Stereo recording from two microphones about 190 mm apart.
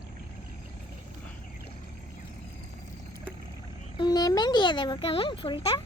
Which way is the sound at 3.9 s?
20° left (ahead or behind).